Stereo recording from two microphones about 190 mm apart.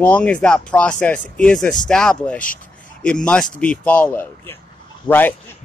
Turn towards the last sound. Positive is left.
turn(degrees=25)  # may be behind; listen again after turning